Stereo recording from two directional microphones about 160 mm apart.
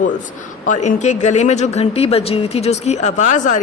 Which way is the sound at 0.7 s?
45° left (ahead or behind).